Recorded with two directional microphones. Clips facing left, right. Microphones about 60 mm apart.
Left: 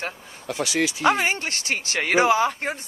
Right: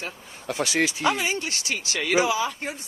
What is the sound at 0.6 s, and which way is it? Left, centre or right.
Speech, right.